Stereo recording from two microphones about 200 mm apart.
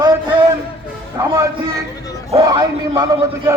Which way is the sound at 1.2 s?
15° right (ahead or behind).